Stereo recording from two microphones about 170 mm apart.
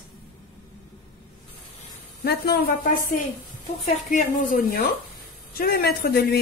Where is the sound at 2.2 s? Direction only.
70° left (ahead or behind).